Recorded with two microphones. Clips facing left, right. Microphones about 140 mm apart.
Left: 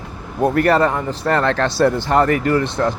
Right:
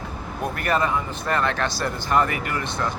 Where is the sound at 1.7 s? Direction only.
65° left (ahead or behind).